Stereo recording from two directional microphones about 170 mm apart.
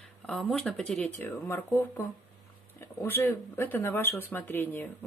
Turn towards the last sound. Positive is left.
turn(degrees=10)  # may be behind; listen again after turning